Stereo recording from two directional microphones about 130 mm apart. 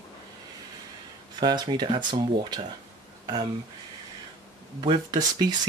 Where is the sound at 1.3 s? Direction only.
35° right (ahead or behind).